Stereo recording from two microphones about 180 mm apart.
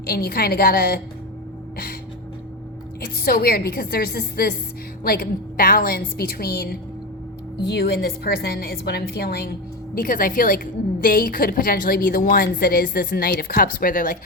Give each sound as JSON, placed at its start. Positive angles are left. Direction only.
{"t": 0.0, "sound": "a woman's voice", "side_deg": 60}
{"t": 3.0, "sound": "a woman's voice", "side_deg": 55}
{"t": 9.9, "sound": "a woman's voice", "side_deg": 50}